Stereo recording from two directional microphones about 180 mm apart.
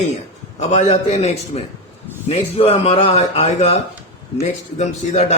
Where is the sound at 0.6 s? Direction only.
40° left (ahead or behind).